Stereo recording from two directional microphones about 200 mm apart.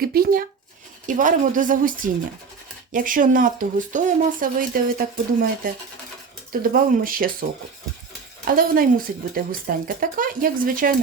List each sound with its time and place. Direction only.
0.0 s a woman's voice: 50° right (ahead or behind)
2.9 s speech: 40° right (ahead or behind)
8.4 s speech: 45° right (ahead or behind)